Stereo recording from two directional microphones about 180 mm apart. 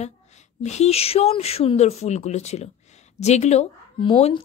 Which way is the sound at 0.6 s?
35° left (ahead or behind).